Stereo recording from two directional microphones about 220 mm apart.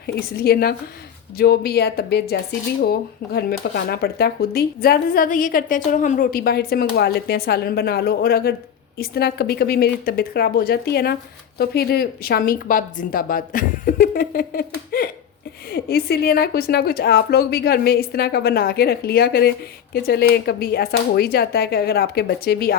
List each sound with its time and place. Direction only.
0.1 s a woman's voice: 45° left (ahead or behind)